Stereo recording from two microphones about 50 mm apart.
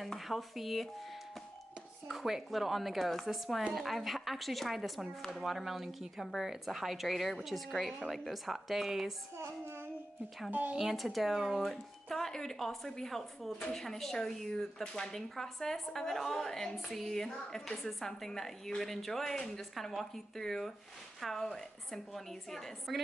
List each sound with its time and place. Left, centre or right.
0.0 s speech: centre
2.0 s a woman's voice: centre
9.4 s child singing: right
10.8 s a woman's voice: centre